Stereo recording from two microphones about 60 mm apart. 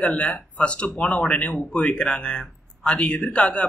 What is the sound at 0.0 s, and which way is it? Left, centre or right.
Speech, centre.